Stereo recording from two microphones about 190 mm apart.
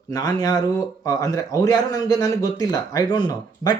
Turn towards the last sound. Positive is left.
turn(degrees=20)  # may be behind; listen again after turning